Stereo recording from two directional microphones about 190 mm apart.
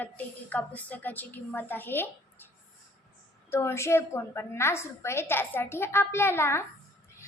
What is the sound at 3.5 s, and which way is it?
A child's voice, 15° left (ahead or behind).